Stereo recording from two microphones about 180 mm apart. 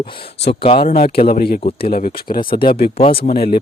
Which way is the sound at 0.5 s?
30° left (ahead or behind).